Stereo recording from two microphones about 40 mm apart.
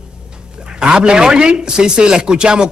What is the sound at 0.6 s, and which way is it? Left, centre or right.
Speech, centre.